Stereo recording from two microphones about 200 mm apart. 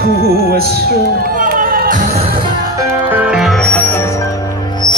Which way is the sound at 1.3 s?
45° right (ahead or behind).